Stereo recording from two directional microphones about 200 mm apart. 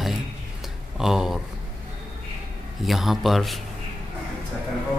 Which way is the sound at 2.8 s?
Centre (ahead or behind).